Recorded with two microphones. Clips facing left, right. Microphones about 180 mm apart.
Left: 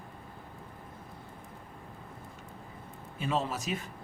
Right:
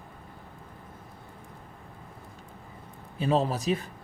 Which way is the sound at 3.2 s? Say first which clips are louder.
Right 6 dB; 35° right (ahead or behind).